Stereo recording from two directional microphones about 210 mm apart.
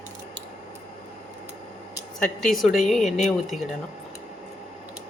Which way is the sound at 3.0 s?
35° left (ahead or behind).